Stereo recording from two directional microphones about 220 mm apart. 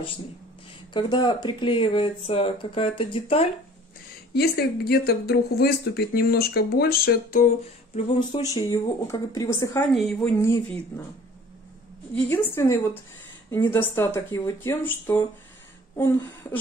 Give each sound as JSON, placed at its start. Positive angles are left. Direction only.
{"t": 1.1, "sound": "speech", "side_deg": 20}
{"t": 4.3, "sound": "speech", "side_deg": 45}
{"t": 8.3, "sound": "speech", "side_deg": 15}
{"t": 9.9, "sound": "a woman's voice", "side_deg": 0}
{"t": 10.4, "sound": "speech", "side_deg": 10}
{"t": 12.3, "sound": "speech", "side_deg": 10}